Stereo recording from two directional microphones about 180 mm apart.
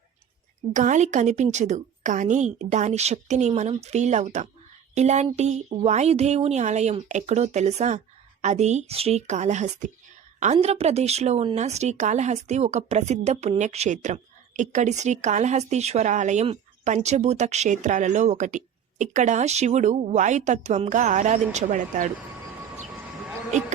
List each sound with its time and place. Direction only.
0.7 s speech: 45° right (ahead or behind)
23.5 s speech: 40° right (ahead or behind)